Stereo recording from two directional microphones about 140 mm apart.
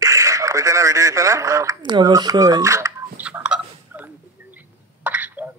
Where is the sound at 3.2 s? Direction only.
10° right (ahead or behind).